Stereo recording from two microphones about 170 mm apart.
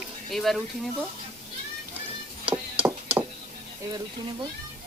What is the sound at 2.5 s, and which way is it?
Chop, 10° right (ahead or behind).